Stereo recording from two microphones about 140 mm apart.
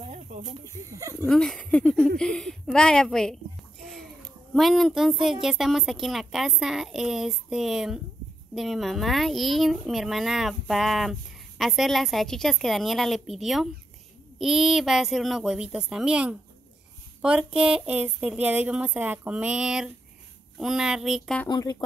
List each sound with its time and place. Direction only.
0.0 s snake: 55° right (ahead or behind)
0.8 s speech: 20° right (ahead or behind)
1.3 s speech: 5° left (ahead or behind)
3.8 s a sound: 5° left (ahead or behind)
4.6 s speech: centre (ahead or behind)
21.5 s speech: 30° left (ahead or behind)